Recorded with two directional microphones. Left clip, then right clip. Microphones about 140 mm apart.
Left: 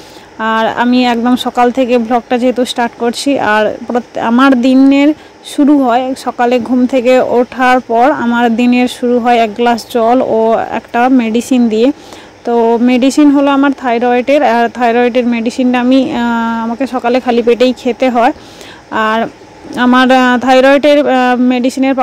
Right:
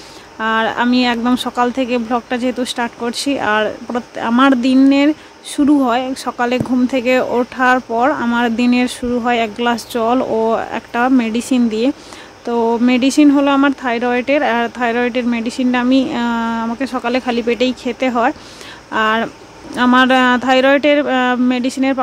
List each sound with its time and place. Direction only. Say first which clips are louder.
0.4 s speech: left 4 dB; 25° left (ahead or behind)